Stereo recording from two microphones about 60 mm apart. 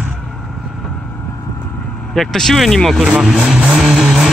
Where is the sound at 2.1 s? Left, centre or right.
Centre.